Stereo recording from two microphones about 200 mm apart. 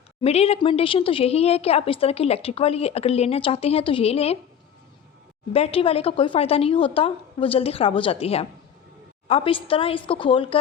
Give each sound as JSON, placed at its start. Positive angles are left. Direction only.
{"t": 0.2, "sound": "a woman's voice", "side_deg": 30}
{"t": 5.5, "sound": "a woman's voice", "side_deg": 30}